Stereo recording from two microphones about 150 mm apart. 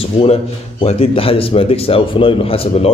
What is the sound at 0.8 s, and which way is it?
Speech, 40° left (ahead or behind).